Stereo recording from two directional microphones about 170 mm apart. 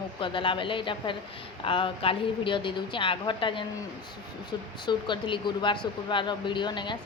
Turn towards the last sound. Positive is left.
turn(degrees=25)  # may be behind; listen again after turning